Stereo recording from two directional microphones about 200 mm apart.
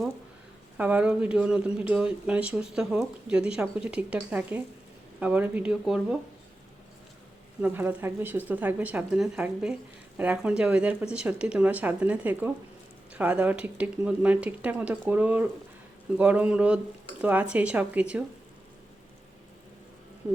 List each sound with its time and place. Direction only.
0.8 s speech: 10° right (ahead or behind)
7.6 s speech: 10° right (ahead or behind)